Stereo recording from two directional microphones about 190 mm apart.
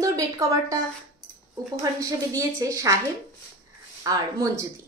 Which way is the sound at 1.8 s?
15° right (ahead or behind).